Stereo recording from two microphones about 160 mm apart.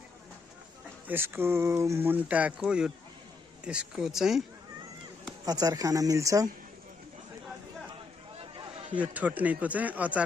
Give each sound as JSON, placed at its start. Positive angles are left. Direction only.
{"t": 1.0, "sound": "speech", "side_deg": -15}
{"t": 5.5, "sound": "speech", "side_deg": -25}
{"t": 8.4, "sound": "a sound", "side_deg": -30}
{"t": 9.0, "sound": "speech", "side_deg": -10}